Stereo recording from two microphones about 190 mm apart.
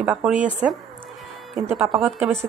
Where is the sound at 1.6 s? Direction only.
10° right (ahead or behind).